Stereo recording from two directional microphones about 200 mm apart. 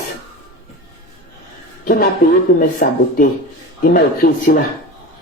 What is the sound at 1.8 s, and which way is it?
A woman's voice, 45° left (ahead or behind).